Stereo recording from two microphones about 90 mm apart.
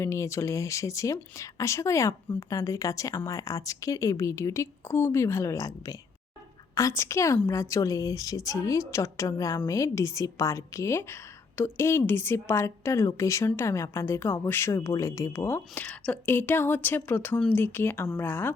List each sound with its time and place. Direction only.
0.0 s a woman's voice: 35° left (ahead or behind)